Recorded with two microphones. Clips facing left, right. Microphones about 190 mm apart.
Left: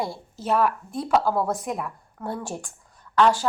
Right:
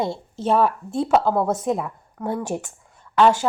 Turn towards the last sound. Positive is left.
turn(degrees=-20)  # may be behind; listen again after turning